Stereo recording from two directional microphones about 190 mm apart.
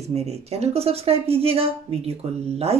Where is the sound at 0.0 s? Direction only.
35° right (ahead or behind).